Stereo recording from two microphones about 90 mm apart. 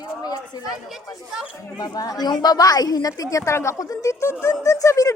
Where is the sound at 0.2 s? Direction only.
45° left (ahead or behind).